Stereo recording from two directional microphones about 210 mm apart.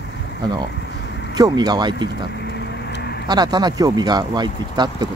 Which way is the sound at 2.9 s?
50° left (ahead or behind).